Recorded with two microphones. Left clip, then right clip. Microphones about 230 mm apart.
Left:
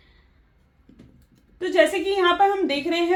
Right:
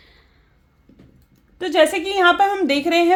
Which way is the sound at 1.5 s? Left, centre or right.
Right.